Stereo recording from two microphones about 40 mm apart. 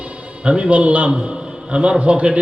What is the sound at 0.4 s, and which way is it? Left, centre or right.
A man's voice, right.